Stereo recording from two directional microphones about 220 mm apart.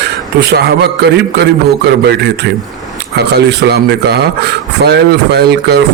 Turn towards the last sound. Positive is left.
turn(degrees=-50)  # may be behind; listen again after turning